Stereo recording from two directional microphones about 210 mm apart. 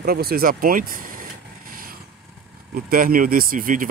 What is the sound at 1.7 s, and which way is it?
Vehicle, 45° right (ahead or behind).